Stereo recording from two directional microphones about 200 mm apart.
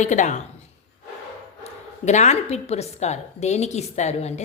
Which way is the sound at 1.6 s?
35° left (ahead or behind).